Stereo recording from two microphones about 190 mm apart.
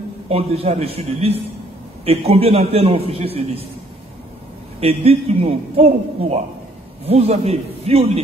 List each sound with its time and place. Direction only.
0.3 s a man's voice: 30° right (ahead or behind)
4.7 s a man's voice: 30° right (ahead or behind)